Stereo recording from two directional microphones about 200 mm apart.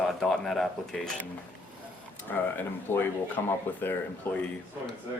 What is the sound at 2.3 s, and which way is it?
Speech, 10° left (ahead or behind).